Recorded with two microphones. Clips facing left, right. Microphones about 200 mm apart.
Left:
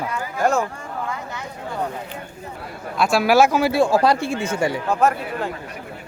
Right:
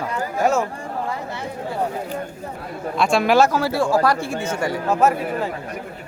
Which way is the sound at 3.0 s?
5° left (ahead or behind).